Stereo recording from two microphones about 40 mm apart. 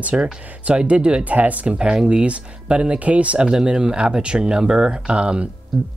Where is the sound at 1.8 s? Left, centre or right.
Centre.